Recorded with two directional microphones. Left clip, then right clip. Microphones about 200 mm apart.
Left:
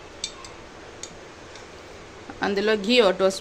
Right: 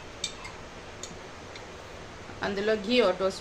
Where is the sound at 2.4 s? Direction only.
50° left (ahead or behind).